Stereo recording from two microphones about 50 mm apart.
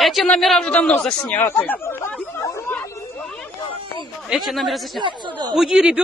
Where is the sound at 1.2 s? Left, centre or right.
Left.